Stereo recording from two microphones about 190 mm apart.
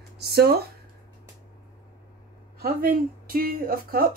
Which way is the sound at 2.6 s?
50° right (ahead or behind).